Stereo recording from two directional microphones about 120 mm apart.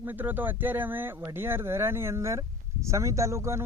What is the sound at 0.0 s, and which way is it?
Speech, 15° right (ahead or behind).